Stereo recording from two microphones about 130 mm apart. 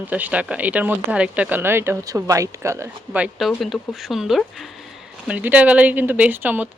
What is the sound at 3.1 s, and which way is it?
Speech, 5° right (ahead or behind).